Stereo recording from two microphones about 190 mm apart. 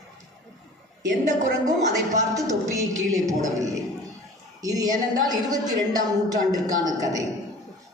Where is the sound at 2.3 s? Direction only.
15° right (ahead or behind).